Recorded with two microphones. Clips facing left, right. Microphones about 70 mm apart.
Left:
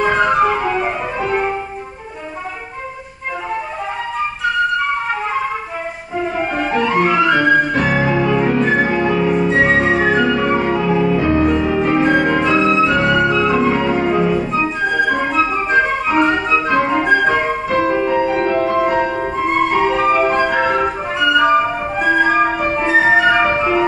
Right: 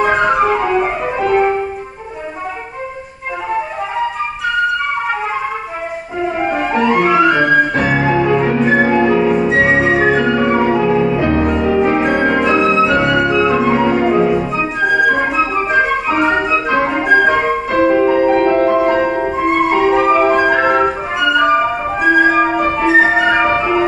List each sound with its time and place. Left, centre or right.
0.0 s music: centre
6.6 s music: centre
9.1 s flute: centre
11.1 s music: centre
13.2 s flute: centre
13.9 s music: centre
15.7 s organ: centre
16.4 s music: centre
16.9 s flute: centre
17.3 s music: centre
18.0 s music: centre
18.5 s music: centre
21.2 s music: centre